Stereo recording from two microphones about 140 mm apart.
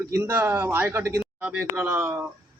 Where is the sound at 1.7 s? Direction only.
20° right (ahead or behind).